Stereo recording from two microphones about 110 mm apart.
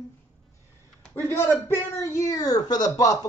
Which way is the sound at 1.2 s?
20° left (ahead or behind).